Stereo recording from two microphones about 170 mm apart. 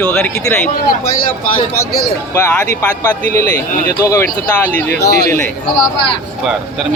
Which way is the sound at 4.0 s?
15° left (ahead or behind).